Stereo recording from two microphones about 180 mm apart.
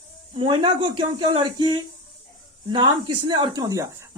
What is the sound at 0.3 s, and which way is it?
A woman's voice, 30° right (ahead or behind).